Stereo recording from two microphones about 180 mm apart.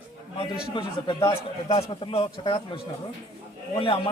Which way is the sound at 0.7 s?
25° left (ahead or behind).